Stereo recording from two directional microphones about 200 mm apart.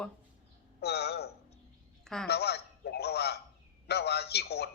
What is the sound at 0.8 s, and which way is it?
Speech, 55° left (ahead or behind).